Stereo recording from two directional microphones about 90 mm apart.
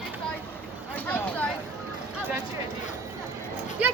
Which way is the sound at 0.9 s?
20° left (ahead or behind).